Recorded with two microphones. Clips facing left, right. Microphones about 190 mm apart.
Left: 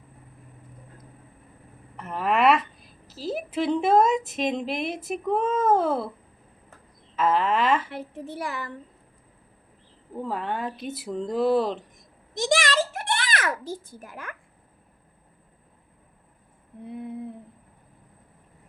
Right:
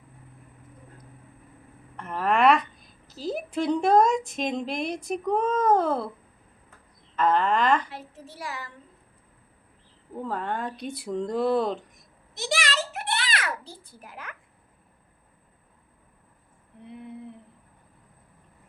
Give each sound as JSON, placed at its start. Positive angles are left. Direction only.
{"t": 2.0, "sound": "a woman's voice", "side_deg": 0}
{"t": 7.2, "sound": "speech", "side_deg": 5}
{"t": 7.9, "sound": "a child's voice", "side_deg": 55}
{"t": 10.2, "sound": "speech", "side_deg": 5}
{"t": 12.4, "sound": "a sound", "side_deg": 50}